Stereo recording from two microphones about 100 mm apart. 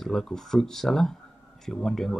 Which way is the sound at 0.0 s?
5° left (ahead or behind).